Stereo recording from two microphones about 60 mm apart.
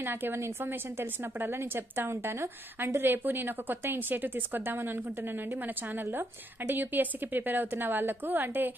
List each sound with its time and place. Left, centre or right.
0.0 s a woman's voice: right
6.7 s a woman's voice: right